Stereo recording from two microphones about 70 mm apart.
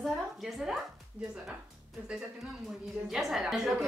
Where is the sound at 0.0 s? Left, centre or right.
Centre.